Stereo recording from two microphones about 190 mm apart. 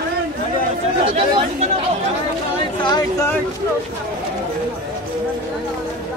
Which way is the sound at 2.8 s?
20° left (ahead or behind).